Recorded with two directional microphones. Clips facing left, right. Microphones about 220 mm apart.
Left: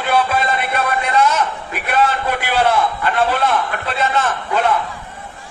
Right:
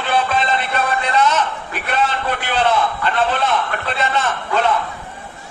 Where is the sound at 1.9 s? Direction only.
10° left (ahead or behind).